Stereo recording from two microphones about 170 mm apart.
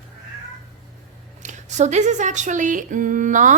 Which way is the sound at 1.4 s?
45° right (ahead or behind).